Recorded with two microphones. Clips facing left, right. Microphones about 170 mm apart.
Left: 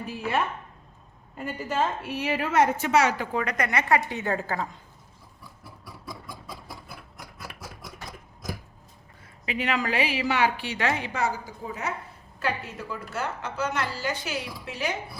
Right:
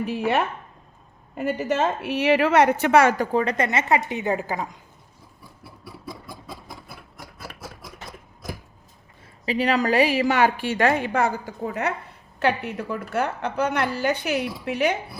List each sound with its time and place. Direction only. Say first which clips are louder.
0.0 s a woman's voice: right 5 dB; 70° right (ahead or behind); by 3.2 s 55° right (ahead or behind)
3.3 s a woman's voice: right 5 dB; 30° right (ahead or behind)
9.5 s a woman's voice: right 6 dB; 35° right (ahead or behind); by 14.9 s 65° right (ahead or behind)